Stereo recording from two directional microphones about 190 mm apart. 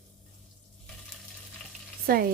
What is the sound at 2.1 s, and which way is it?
Dishes, 50° right (ahead or behind).